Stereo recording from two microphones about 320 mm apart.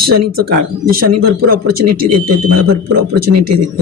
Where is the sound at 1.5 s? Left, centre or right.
Right.